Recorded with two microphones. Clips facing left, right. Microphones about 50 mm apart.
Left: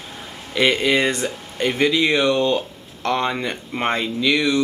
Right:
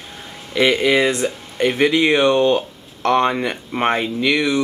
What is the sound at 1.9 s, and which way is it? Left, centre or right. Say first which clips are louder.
Speech: right 3 dB; right.